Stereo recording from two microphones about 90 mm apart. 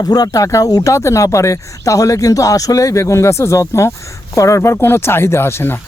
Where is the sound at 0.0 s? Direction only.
45° left (ahead or behind).